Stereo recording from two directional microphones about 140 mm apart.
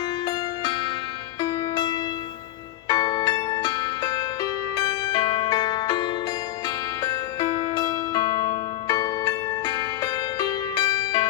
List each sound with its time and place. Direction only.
1.4 s music: 25° left (ahead or behind)